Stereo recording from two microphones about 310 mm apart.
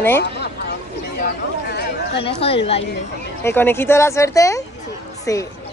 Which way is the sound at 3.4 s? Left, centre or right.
Centre.